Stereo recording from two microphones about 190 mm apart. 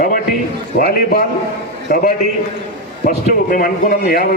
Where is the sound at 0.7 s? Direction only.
55° left (ahead or behind).